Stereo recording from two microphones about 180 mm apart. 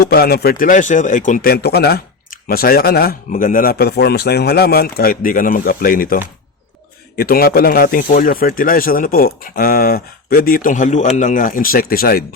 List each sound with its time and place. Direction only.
0.0 s speech: 60° left (ahead or behind)
7.2 s speech: 55° left (ahead or behind)